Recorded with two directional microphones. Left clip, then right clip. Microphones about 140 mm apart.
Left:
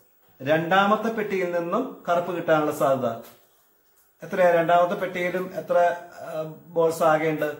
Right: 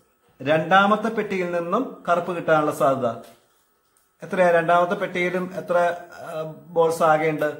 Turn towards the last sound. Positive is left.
turn(degrees=-30)  # may be behind; listen again after turning